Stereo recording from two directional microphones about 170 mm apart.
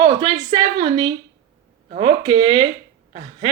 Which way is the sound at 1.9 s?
35° right (ahead or behind).